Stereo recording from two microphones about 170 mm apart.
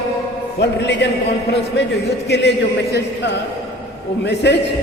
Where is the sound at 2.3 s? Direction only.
80° left.